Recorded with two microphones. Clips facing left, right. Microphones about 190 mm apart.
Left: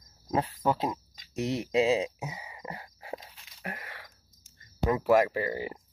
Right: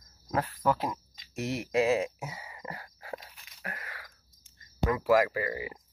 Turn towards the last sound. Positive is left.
turn(degrees=30)  # may be behind; listen again after turning